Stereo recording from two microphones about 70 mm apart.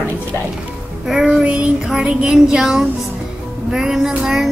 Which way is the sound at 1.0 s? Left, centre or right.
Centre.